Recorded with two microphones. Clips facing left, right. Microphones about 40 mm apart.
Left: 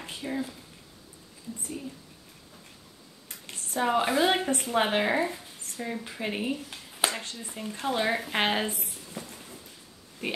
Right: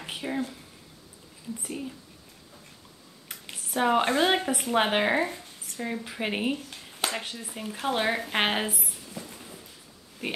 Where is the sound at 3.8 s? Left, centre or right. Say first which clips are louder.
Right 1 dB; centre.